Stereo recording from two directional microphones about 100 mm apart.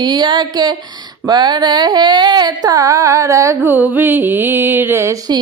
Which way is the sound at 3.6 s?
15° right (ahead or behind).